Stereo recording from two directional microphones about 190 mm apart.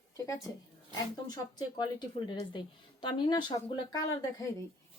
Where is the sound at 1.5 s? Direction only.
25° left (ahead or behind).